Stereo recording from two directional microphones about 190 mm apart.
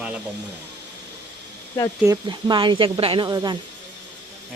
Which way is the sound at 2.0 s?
20° right (ahead or behind).